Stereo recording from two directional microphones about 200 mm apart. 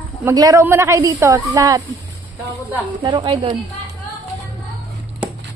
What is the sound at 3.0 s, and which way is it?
Speech, 25° right (ahead or behind).